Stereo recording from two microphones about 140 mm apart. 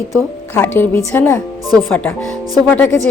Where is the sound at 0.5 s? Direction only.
15° left (ahead or behind).